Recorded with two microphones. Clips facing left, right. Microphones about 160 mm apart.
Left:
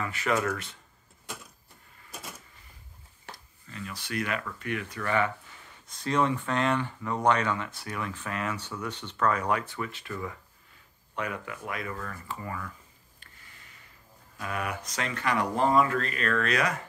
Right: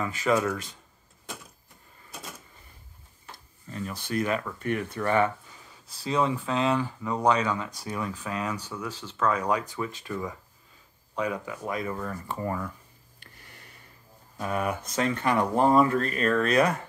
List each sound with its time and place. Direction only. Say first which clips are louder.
0.0 s speech: right 3 dB; 20° right (ahead or behind)
3.7 s speech: right 4 dB; 35° right (ahead or behind)
4.8 s speech: right 3 dB; 30° right (ahead or behind)
6.1 s speech: right 1 dB; 5° right (ahead or behind)
7.8 s speech: right 3 dB; 20° right (ahead or behind); by 9.5 s 5° right (ahead or behind)
9.8 s speech: right 3 dB; 15° right (ahead or behind)
11.2 s speech: right 6 dB; 15° right (ahead or behind)
12.4 s speech: right 8 dB; 40° right (ahead or behind)
14.4 s speech: right 5 dB; 35° right (ahead or behind)
15.5 s speech: right 3 dB; 40° right (ahead or behind)